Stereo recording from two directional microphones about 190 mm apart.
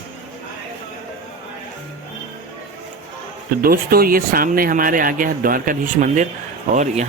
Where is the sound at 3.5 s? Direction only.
50° right (ahead or behind).